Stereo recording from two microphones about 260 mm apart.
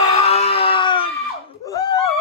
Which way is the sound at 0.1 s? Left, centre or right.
Left.